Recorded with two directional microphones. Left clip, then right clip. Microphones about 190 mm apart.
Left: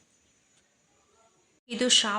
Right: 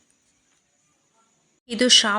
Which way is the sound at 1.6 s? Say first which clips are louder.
Right 7 dB; 30° right (ahead or behind).